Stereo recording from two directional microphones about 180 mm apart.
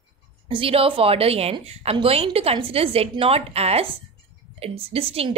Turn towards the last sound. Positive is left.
turn(degrees=-30)  # may be behind; listen again after turning